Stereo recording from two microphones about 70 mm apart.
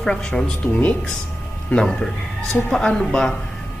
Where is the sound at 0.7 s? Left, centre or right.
Left.